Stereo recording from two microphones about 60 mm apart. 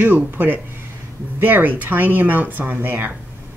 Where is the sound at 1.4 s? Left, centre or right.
Right.